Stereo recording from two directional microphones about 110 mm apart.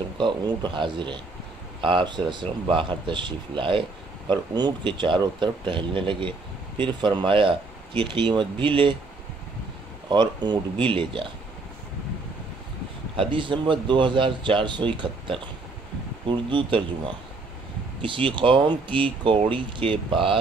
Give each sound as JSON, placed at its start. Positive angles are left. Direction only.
{"t": 0.2, "sound": "speech", "side_deg": -45}
{"t": 10.0, "sound": "speech", "side_deg": -40}
{"t": 13.1, "sound": "speech", "side_deg": -50}
{"t": 18.0, "sound": "speech", "side_deg": -50}